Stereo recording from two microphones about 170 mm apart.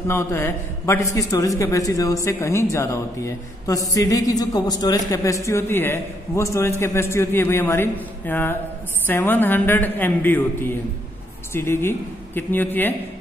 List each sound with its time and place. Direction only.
0.1 s a woman's voice: 15° left (ahead or behind)